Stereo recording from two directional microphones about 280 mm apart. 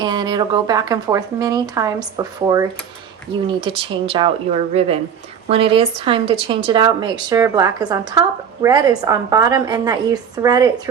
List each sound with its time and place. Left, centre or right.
0.0 s a woman's voice: centre